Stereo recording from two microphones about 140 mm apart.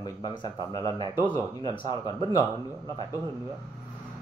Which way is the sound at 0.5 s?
35° right (ahead or behind).